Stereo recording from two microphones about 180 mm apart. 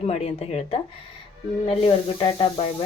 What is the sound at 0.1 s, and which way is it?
Speech, 35° left (ahead or behind).